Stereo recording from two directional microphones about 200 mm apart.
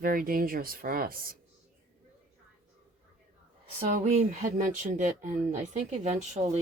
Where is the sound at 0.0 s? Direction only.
45° right (ahead or behind).